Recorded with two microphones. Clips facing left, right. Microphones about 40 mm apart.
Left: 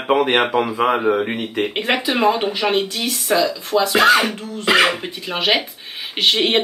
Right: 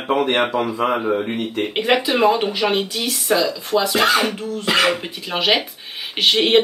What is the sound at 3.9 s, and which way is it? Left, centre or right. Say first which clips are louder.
Speech: left 6 dB; left.